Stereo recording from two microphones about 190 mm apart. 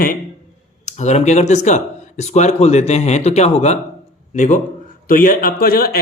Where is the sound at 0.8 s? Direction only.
40° left (ahead or behind).